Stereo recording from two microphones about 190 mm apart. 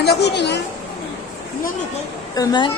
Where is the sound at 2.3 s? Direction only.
20° left (ahead or behind).